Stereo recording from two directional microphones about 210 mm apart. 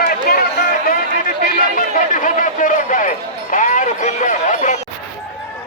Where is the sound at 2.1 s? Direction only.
40° left (ahead or behind).